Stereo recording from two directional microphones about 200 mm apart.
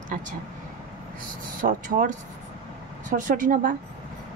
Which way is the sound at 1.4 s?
40° right (ahead or behind).